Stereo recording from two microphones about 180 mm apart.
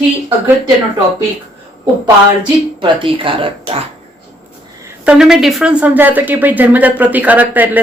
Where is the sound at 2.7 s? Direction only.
30° right (ahead or behind).